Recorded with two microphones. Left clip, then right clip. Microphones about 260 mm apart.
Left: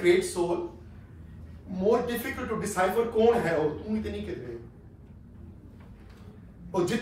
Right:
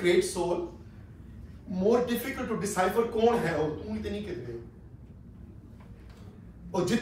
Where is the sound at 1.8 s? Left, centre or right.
Centre.